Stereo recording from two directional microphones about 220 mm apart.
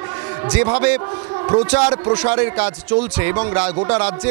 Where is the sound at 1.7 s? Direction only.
20° right (ahead or behind).